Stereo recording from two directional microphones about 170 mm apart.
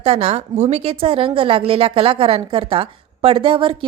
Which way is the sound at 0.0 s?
35° right (ahead or behind).